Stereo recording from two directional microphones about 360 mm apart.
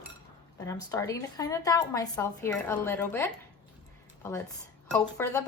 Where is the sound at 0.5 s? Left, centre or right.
Centre.